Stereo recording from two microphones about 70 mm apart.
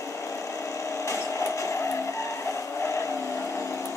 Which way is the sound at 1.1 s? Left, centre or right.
Left.